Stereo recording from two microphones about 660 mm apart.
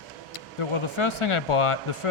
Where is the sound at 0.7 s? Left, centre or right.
Left.